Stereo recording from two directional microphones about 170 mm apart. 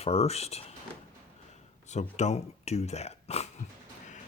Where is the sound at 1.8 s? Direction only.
45° left (ahead or behind).